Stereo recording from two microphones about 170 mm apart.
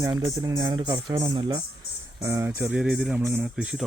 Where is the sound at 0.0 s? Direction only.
20° right (ahead or behind).